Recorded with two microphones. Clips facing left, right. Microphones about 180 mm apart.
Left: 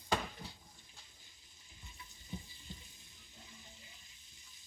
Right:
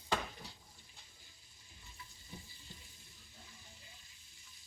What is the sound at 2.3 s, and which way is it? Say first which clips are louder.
Frying: left 6 dB; 20° left (ahead or behind).